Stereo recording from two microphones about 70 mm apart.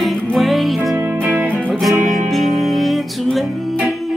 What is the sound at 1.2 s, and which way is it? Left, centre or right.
Music, right.